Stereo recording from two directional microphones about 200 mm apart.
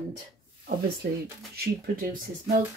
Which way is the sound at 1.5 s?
45° right (ahead or behind).